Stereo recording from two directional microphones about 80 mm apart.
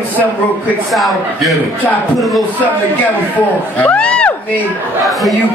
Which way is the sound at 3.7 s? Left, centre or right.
Centre.